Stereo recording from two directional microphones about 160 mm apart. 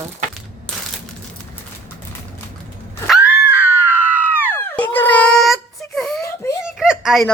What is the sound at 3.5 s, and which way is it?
Screaming, 10° right (ahead or behind).